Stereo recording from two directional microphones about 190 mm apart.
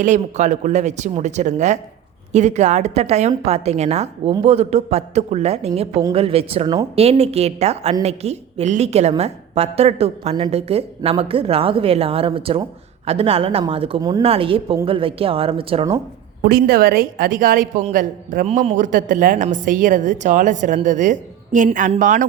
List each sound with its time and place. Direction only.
0.0 s a woman's voice: 40° right (ahead or behind)
16.4 s a woman's voice: 50° right (ahead or behind)